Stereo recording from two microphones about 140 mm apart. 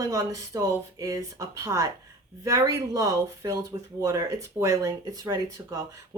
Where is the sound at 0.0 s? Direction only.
25° right (ahead or behind).